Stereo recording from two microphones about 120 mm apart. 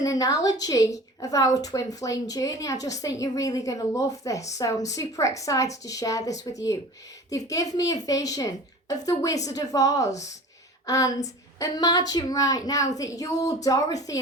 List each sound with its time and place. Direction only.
0.0 s a woman's voice: 30° left (ahead or behind)